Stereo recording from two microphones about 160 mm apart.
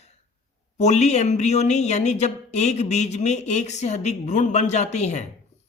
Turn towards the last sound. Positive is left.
turn(degrees=45)  # may be behind; listen again after turning